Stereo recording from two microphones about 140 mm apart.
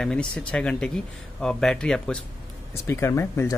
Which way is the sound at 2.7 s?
20° left (ahead or behind).